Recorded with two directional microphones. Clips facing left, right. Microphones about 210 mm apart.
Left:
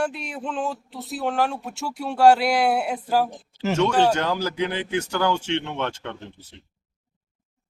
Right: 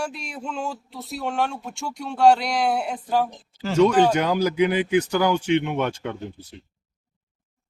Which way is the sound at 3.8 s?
10° right (ahead or behind).